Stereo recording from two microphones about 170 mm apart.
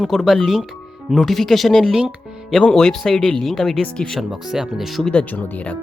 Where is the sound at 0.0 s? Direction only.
Centre (ahead or behind).